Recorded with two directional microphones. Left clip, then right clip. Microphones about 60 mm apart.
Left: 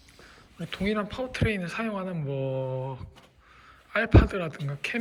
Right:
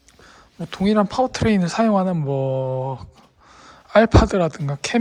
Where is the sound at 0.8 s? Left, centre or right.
Right.